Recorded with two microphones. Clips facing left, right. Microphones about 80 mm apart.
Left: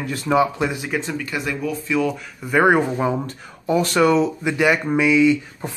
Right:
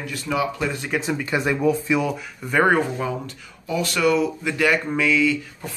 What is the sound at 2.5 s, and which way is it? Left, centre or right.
Speech, centre.